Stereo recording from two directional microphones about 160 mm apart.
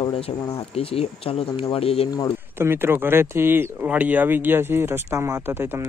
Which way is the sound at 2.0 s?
25° left (ahead or behind).